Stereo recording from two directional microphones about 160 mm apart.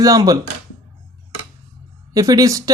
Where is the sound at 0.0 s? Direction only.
20° right (ahead or behind).